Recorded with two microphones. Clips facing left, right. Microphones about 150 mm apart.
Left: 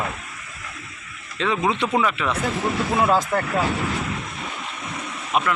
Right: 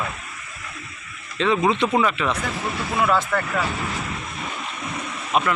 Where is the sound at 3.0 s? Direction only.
30° left (ahead or behind).